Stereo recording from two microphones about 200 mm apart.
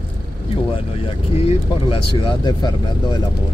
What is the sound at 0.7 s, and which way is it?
Speech, 25° left (ahead or behind).